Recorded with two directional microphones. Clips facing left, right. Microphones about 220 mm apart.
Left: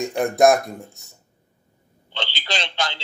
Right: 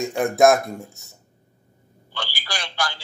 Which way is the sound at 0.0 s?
Centre (ahead or behind).